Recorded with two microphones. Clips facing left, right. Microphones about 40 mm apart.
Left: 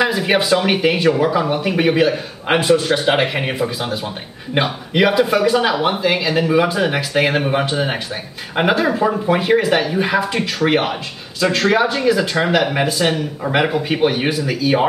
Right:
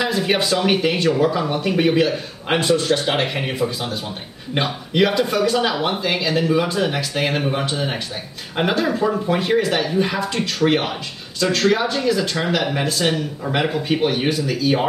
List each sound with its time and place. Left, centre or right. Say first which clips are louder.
0.0 s speech: left 3 dB; centre